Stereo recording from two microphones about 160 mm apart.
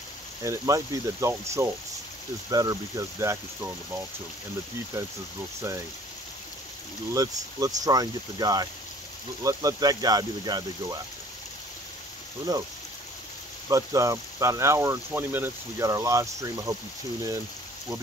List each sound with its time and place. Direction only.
0.4 s speech: 20° right (ahead or behind)
7.2 s speech: 20° right (ahead or behind)
12.5 s speech: 20° right (ahead or behind)
13.7 s speech: 20° right (ahead or behind)